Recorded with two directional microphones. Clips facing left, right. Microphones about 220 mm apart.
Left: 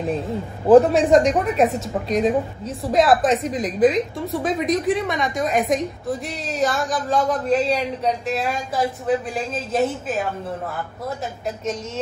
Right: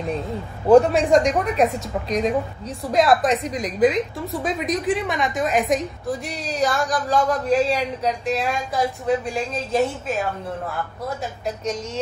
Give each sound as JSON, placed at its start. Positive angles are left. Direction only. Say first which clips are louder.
{"t": 0.7, "sound": "a woman's voice", "louder": "left 1 dB", "side_deg": 0}